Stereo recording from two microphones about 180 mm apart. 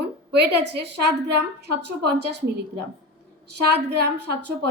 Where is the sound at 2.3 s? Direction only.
70° right (ahead or behind).